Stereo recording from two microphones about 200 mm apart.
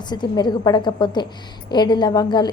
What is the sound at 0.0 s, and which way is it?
A woman's voice, 20° left (ahead or behind).